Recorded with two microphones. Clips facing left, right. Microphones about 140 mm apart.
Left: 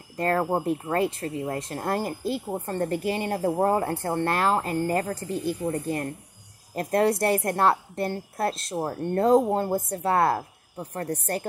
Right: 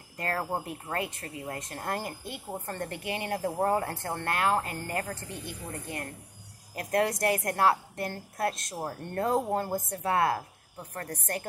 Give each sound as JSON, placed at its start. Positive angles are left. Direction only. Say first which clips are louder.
{"t": 0.2, "sound": "speech", "louder": "left 8 dB", "side_deg": 40}